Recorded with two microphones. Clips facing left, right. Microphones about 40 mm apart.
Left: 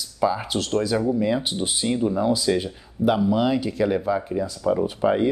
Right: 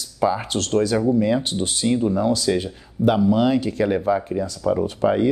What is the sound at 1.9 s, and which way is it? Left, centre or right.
Speech, centre.